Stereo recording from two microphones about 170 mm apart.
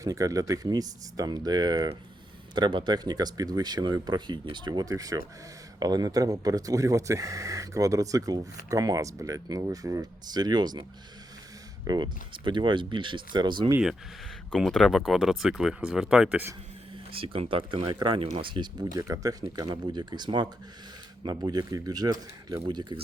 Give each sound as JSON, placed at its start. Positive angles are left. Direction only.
{"t": 0.0, "sound": "speech", "side_deg": -20}
{"t": 11.9, "sound": "speech", "side_deg": -25}
{"t": 14.5, "sound": "speech", "side_deg": 0}
{"t": 17.1, "sound": "speech", "side_deg": -35}